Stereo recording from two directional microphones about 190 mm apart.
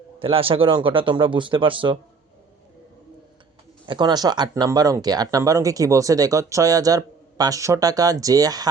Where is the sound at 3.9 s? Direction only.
25° right (ahead or behind).